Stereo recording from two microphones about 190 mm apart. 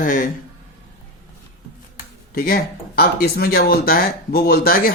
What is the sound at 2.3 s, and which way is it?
A man's voice, 50° left (ahead or behind).